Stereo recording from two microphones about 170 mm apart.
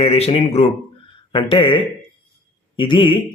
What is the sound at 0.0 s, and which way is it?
Speech, 35° left (ahead or behind).